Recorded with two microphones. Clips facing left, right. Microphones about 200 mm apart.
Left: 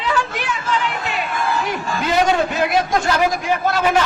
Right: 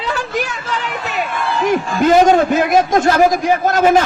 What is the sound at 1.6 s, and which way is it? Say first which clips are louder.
A man's voice: right 9 dB; 45° right (ahead or behind).